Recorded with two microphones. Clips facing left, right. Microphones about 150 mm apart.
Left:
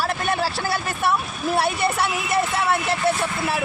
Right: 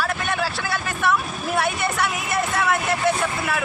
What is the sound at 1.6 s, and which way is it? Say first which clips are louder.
Speech: left 1 dB; 35° left (ahead or behind).